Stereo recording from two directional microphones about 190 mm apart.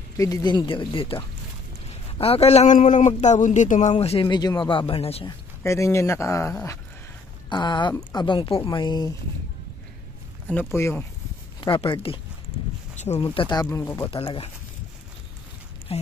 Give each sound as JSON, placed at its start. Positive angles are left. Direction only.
{"t": 0.2, "sound": "a man's voice", "side_deg": 20}
{"t": 3.9, "sound": "speech", "side_deg": 30}
{"t": 5.6, "sound": "speech", "side_deg": 15}
{"t": 10.5, "sound": "speech", "side_deg": 10}
{"t": 11.6, "sound": "speech", "side_deg": 25}
{"t": 14.1, "sound": "speech", "side_deg": 30}
{"t": 15.9, "sound": "speech", "side_deg": 30}